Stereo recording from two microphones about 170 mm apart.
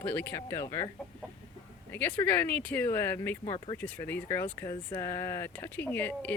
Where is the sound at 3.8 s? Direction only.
10° left (ahead or behind).